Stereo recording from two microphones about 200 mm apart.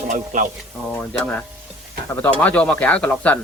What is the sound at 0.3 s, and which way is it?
Speech, 40° right (ahead or behind).